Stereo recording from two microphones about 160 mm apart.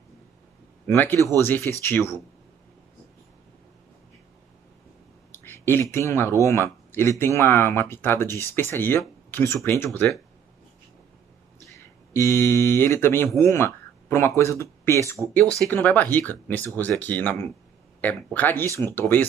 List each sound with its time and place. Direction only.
0.8 s speech: 15° left (ahead or behind)
5.3 s speech: 15° left (ahead or behind)
11.6 s speech: 20° left (ahead or behind)